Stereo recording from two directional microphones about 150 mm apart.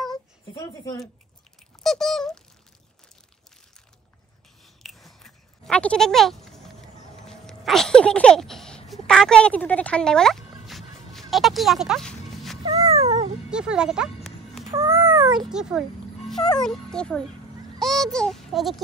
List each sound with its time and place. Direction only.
0.1 s a sound: 25° left (ahead or behind)
1.8 s speech: centre (ahead or behind)
4.8 s a sound: centre (ahead or behind)
12.6 s cat: 25° right (ahead or behind)
13.5 s music: 5° right (ahead or behind)
14.7 s cat: 20° right (ahead or behind)
15.5 s a child's voice: 5° right (ahead or behind)